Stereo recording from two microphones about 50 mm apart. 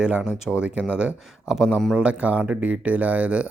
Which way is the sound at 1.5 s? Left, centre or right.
Centre.